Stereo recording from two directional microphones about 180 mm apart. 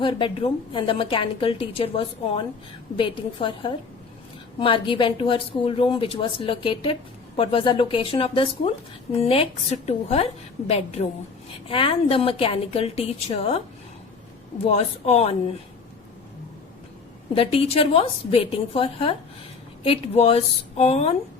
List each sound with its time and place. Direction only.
0.0 s a woman's voice: 30° left (ahead or behind)
14.7 s a woman's voice: 35° left (ahead or behind)
17.3 s a woman's voice: 30° left (ahead or behind)